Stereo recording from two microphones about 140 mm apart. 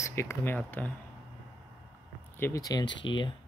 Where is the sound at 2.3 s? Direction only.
20° left (ahead or behind); by 3.3 s 35° left (ahead or behind).